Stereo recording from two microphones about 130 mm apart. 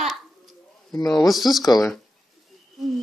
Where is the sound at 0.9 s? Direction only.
30° left (ahead or behind).